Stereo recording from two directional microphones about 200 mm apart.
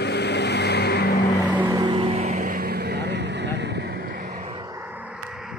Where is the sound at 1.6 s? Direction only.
20° right (ahead or behind); by 4.2 s 50° right (ahead or behind).